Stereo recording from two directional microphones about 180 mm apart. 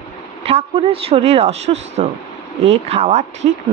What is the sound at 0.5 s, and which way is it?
A woman's voice, 35° right (ahead or behind).